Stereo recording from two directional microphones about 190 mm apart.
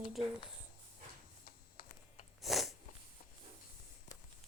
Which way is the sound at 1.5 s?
50° left (ahead or behind).